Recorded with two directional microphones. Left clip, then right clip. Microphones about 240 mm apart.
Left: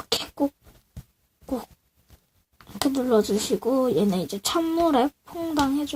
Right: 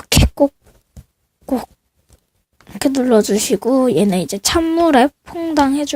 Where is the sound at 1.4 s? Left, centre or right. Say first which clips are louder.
Right 10 dB; right.